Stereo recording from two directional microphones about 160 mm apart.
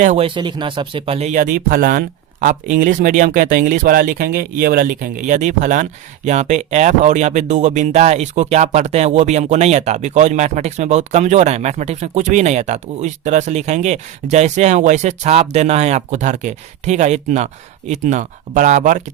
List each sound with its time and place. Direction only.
0.2 s speech: 30° right (ahead or behind); by 19.0 s 50° right (ahead or behind)